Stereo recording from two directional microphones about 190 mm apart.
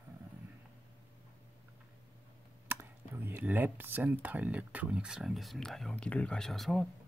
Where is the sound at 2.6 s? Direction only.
10° right (ahead or behind).